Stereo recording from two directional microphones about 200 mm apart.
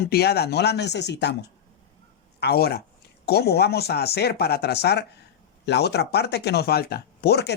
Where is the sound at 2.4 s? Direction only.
50° left (ahead or behind).